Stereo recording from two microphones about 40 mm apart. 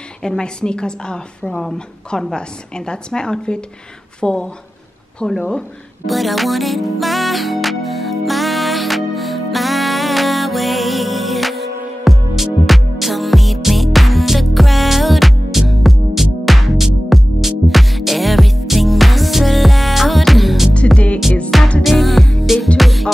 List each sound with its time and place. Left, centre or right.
0.2 s a woman's voice: left
6.0 s music: centre